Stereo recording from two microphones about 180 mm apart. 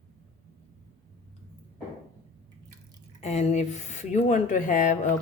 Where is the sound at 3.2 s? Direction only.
35° left (ahead or behind).